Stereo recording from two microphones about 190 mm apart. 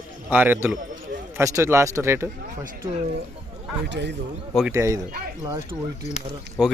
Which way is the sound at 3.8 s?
65° right (ahead or behind).